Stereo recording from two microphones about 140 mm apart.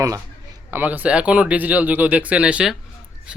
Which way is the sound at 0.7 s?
10° right (ahead or behind).